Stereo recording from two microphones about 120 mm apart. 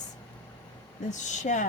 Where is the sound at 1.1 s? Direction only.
90° left.